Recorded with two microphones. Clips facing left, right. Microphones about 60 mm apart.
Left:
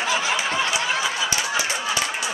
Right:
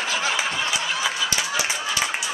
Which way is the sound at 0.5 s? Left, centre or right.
Left.